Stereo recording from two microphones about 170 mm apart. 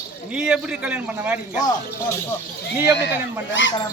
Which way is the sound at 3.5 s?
90° left.